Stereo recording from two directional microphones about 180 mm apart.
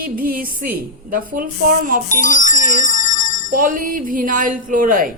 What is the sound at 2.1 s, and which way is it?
Speech, 45° left (ahead or behind).